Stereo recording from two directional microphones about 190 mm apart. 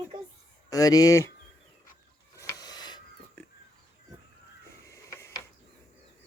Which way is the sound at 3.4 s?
10° left (ahead or behind).